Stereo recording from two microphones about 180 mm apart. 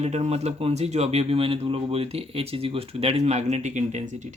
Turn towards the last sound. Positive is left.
turn(degrees=-40)  # may be behind; listen again after turning